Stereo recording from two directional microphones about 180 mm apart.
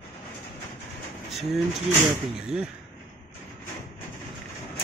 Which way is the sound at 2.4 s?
5° right (ahead or behind).